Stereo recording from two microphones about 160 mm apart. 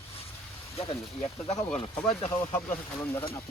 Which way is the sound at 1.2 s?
45° left (ahead or behind).